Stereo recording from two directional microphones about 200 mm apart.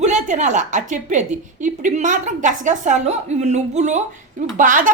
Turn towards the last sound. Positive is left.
turn(degrees=-40)  # may be behind; listen again after turning